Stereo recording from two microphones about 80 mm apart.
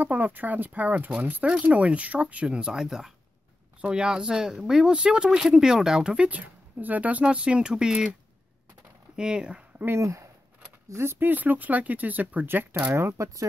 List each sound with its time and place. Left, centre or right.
0.0 s speech: right
9.1 s speech: centre
9.8 s speech: right
12.9 s speech: right